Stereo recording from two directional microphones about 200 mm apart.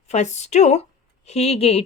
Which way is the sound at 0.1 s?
35° left (ahead or behind).